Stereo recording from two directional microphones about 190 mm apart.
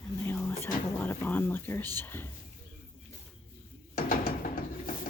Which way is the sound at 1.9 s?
10° left (ahead or behind).